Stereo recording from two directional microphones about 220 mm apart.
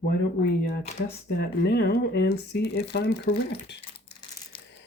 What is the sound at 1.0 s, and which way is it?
Speech, 45° left (ahead or behind).